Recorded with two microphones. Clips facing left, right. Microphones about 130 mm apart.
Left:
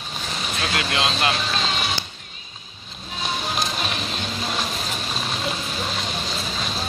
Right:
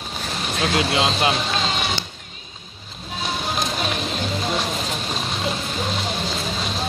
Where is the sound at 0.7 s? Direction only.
30° right (ahead or behind).